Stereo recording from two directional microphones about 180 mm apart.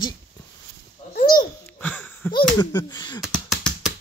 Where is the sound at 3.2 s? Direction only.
Centre (ahead or behind).